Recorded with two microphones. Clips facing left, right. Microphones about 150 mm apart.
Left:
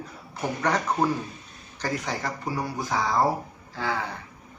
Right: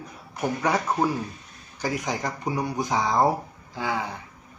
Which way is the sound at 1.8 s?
15° right (ahead or behind).